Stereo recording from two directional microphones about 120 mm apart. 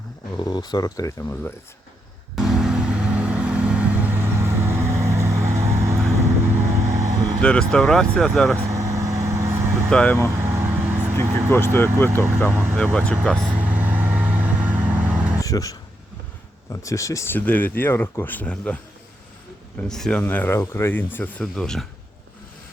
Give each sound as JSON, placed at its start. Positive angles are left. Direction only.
{"t": 0.3, "sound": "speech", "side_deg": 35}
{"t": 1.2, "sound": "speech", "side_deg": 20}
{"t": 2.3, "sound": "vehicle", "side_deg": 0}
{"t": 7.4, "sound": "speech", "side_deg": 10}
{"t": 8.7, "sound": "vehicle", "side_deg": -25}
{"t": 9.9, "sound": "speech", "side_deg": 10}
{"t": 10.3, "sound": "vehicle", "side_deg": -20}
{"t": 11.5, "sound": "speech", "side_deg": 20}
{"t": 12.7, "sound": "speech", "side_deg": 10}
{"t": 13.5, "sound": "vehicle", "side_deg": -15}
{"t": 15.4, "sound": "a sound", "side_deg": 30}
{"t": 16.8, "sound": "speech", "side_deg": 25}
{"t": 19.9, "sound": "speech", "side_deg": 5}
{"t": 20.2, "sound": "speech", "side_deg": 15}